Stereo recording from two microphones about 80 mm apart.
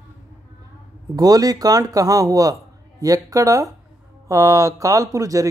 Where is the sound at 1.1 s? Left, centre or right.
Right.